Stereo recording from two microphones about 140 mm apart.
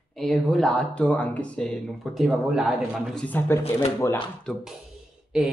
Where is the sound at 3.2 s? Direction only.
15° left (ahead or behind).